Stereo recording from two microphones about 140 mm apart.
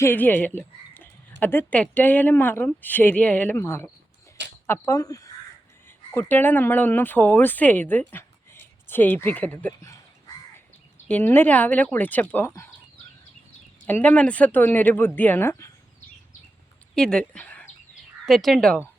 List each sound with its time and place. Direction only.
0.0 s speech: 15° left (ahead or behind)
6.1 s speech: 15° left (ahead or behind)
11.1 s speech: 15° left (ahead or behind)
13.8 s speech: 10° left (ahead or behind)
16.9 s speech: 5° left (ahead or behind)